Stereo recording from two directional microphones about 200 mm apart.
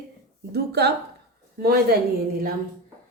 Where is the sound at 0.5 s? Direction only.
55° right (ahead or behind).